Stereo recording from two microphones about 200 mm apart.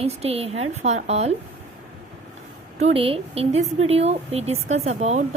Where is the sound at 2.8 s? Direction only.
30° right (ahead or behind).